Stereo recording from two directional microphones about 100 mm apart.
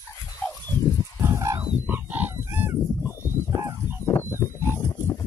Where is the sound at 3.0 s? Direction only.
30° left (ahead or behind).